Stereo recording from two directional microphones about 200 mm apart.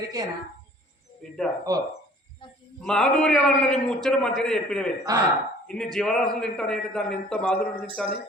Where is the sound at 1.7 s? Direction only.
20° right (ahead or behind).